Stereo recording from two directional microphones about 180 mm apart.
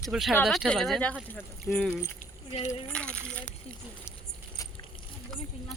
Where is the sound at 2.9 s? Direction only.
5° left (ahead or behind).